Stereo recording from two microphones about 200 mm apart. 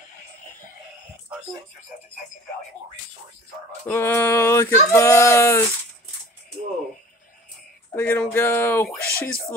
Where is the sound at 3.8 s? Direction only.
10° left (ahead or behind).